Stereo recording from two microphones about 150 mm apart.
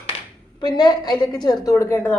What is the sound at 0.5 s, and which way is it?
A woman's voice, 30° left (ahead or behind).